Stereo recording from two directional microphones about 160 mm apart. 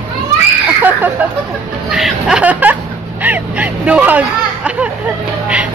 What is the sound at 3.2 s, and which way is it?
Hubbub, 10° right (ahead or behind).